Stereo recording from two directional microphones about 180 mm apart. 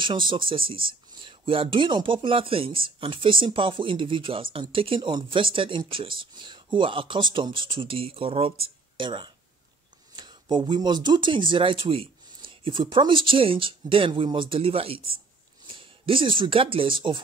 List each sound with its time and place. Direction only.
0.0 s speech: 25° right (ahead or behind)